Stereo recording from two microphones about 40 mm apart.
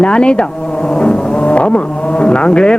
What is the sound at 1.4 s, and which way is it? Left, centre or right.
Vehicle, left.